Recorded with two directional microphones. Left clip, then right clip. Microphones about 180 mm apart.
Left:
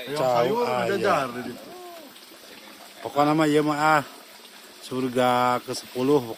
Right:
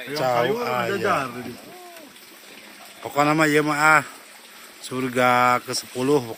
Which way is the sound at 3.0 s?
Centre (ahead or behind).